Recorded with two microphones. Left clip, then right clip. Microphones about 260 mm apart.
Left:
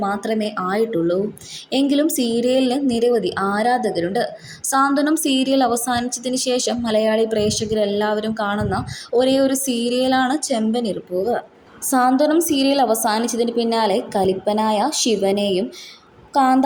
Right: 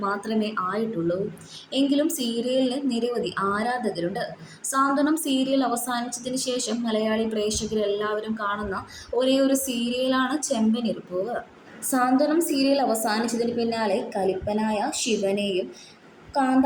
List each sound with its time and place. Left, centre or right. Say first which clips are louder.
0.0 s a woman's voice: left 5 dB; left